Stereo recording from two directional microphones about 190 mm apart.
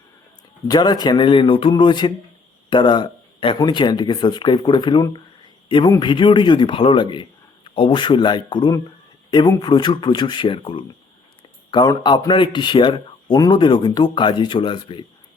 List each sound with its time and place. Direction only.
0.7 s speech: 20° left (ahead or behind)